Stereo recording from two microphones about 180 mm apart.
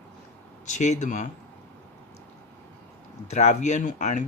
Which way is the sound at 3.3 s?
40° left (ahead or behind).